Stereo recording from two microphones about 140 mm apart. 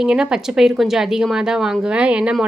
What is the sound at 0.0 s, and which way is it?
A woman's voice, 5° right (ahead or behind).